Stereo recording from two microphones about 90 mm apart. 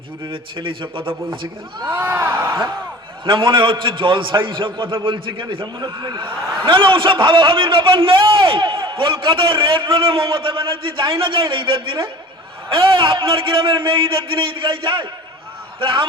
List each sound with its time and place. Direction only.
0.3 s a man's voice: 70° right (ahead or behind)
1.8 s speech: 20° right (ahead or behind)
2.3 s a man's voice: 65° right (ahead or behind)